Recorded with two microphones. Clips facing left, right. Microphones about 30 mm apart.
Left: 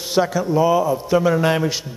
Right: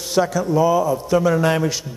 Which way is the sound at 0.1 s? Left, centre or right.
Left.